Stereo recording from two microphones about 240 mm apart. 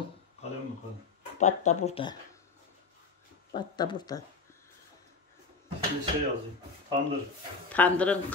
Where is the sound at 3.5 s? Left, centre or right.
Centre.